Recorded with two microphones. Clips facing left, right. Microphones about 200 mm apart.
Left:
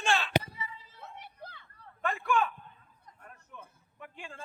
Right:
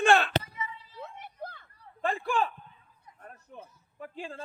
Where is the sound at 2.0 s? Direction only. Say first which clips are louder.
Right 1 dB; 30° right (ahead or behind).